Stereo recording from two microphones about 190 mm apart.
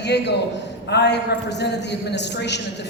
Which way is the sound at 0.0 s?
60° left (ahead or behind).